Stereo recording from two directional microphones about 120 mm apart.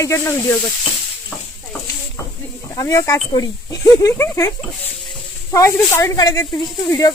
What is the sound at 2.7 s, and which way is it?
Speech, 30° left (ahead or behind).